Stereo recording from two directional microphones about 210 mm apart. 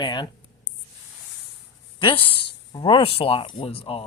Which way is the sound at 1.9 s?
25° left (ahead or behind).